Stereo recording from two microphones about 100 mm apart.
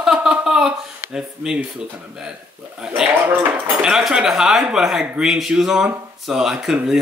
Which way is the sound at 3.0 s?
20° right (ahead or behind).